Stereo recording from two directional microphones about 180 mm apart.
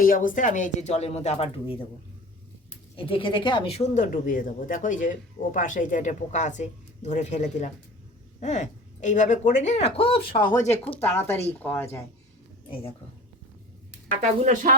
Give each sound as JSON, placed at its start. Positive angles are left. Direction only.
{"t": 0.0, "sound": "speech", "side_deg": 50}
{"t": 2.9, "sound": "speech", "side_deg": 30}
{"t": 10.7, "sound": "speech", "side_deg": 10}
{"t": 14.4, "sound": "speech", "side_deg": -45}